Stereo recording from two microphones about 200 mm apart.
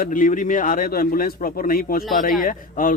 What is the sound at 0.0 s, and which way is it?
Speech, 40° left (ahead or behind).